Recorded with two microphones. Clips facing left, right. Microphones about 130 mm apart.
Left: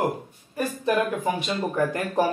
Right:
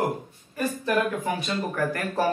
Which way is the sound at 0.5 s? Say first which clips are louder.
Left 1 dB; 15° left (ahead or behind).